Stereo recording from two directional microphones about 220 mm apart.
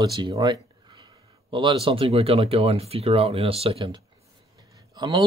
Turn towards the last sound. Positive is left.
turn(degrees=-15)  # may be behind; listen again after turning